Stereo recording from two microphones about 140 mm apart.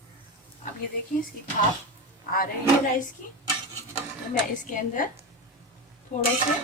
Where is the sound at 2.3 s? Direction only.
85° left.